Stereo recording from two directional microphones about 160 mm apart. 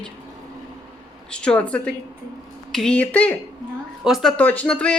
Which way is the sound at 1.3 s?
5° left (ahead or behind).